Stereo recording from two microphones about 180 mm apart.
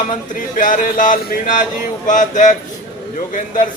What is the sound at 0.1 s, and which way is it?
Speech, 50° left (ahead or behind).